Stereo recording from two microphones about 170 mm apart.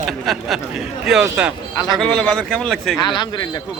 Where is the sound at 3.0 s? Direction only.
25° left (ahead or behind).